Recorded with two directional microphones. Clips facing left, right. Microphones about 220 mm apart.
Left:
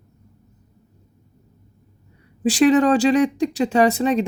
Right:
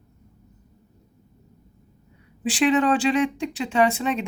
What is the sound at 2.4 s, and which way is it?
Speech, 40° left (ahead or behind).